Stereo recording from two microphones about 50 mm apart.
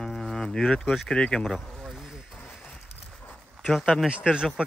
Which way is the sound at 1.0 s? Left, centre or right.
Centre.